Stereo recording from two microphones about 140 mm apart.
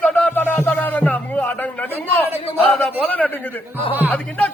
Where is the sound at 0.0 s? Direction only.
10° left (ahead or behind).